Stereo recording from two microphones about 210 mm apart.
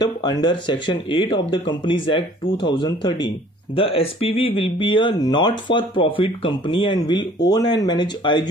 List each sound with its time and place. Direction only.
0.0 s speech: 20° left (ahead or behind)